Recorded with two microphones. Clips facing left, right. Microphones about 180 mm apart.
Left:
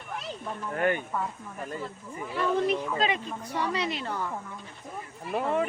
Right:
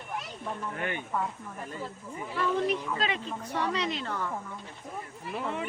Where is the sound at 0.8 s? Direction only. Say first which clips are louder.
Left 11 dB; 45° left (ahead or behind).